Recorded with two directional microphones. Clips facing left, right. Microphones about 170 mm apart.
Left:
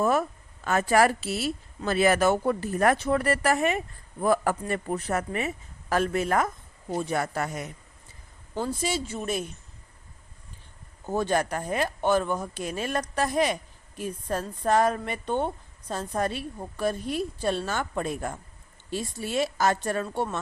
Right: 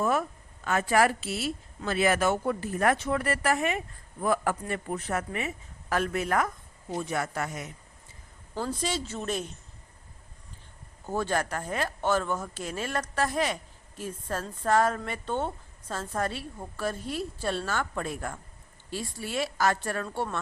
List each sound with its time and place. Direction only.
0.0 s a woman's voice: 40° left (ahead or behind)
8.5 s a woman's voice: 15° left (ahead or behind)
11.0 s a woman's voice: 20° left (ahead or behind)